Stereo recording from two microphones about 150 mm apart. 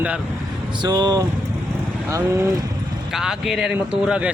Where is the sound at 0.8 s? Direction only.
25° right (ahead or behind).